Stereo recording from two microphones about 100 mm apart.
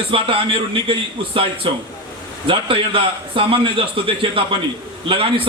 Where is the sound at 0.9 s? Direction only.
60° right (ahead or behind).